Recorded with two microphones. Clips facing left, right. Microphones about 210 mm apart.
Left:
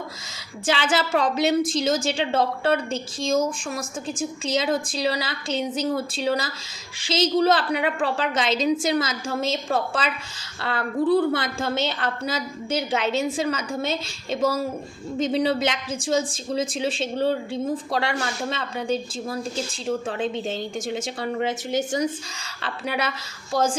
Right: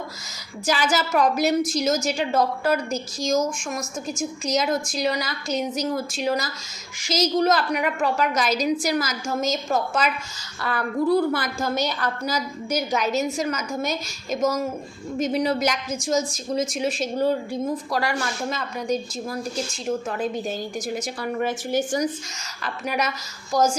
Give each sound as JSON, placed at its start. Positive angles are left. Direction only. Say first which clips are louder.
{"t": 0.6, "sound": "a woman's voice", "louder": "even", "side_deg": 30}